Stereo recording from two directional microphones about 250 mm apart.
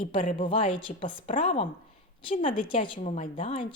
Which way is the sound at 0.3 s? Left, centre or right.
Left.